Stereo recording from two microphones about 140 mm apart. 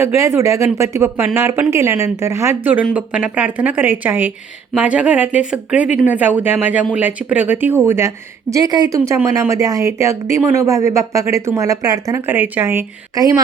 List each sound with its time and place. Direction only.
0.0 s speech: 20° right (ahead or behind)